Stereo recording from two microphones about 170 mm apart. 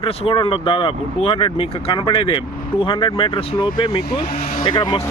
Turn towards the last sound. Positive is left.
turn(degrees=25)  # may be behind; listen again after turning